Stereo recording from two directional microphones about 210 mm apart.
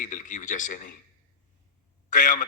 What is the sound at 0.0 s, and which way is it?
Speech, 35° left (ahead or behind).